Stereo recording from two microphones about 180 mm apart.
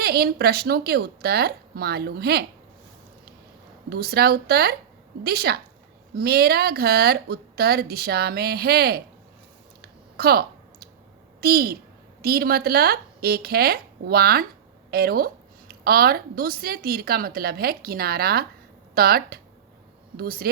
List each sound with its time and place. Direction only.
0.0 s a woman's voice: 60° right (ahead or behind)
3.8 s a woman's voice: 60° right (ahead or behind)
9.8 s clicking: 55° right (ahead or behind)
11.3 s a woman's voice: 60° right (ahead or behind)